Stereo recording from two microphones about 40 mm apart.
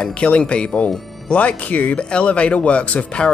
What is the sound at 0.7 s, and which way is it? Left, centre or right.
Speech, left.